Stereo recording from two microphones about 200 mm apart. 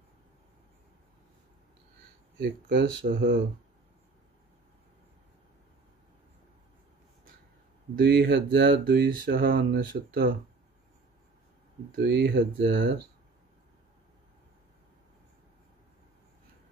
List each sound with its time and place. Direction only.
2.3 s speech: 60° right (ahead or behind)
7.9 s speech: 50° right (ahead or behind)
12.0 s speech: 55° right (ahead or behind)